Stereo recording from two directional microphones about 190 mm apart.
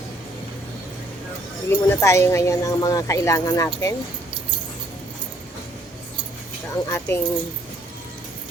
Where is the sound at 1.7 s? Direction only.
15° left (ahead or behind).